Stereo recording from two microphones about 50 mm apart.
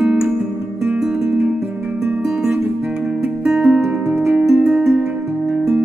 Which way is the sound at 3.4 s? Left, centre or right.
Centre.